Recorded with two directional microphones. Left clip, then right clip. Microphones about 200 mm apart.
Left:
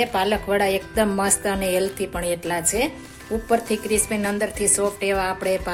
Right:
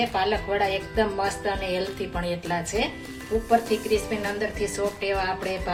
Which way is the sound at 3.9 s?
60° left (ahead or behind).